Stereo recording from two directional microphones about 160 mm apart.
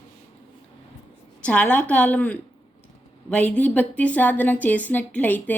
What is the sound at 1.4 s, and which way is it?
A woman's voice, 10° left (ahead or behind).